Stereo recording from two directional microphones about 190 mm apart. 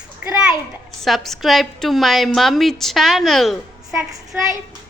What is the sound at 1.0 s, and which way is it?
A woman's voice, centre (ahead or behind).